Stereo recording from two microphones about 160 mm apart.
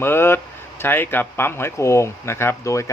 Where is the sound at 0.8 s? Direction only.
15° left (ahead or behind).